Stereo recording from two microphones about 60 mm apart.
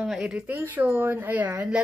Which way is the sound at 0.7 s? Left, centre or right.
Right.